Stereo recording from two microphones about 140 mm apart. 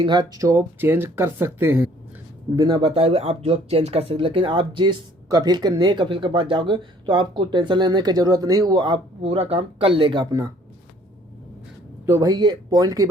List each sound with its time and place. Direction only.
0.0 s speech: 30° right (ahead or behind); by 1.9 s 15° right (ahead or behind)
2.6 s speech: 30° right (ahead or behind)
12.0 s speech: 25° right (ahead or behind)